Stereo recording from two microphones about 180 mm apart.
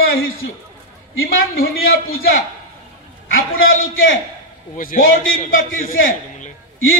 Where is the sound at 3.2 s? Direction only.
90° left.